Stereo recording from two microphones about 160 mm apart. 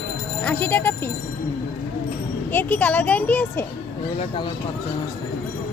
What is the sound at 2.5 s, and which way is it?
A child's voice, 10° left (ahead or behind).